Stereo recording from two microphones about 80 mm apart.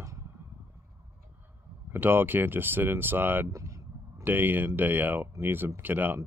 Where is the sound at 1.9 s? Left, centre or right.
Right.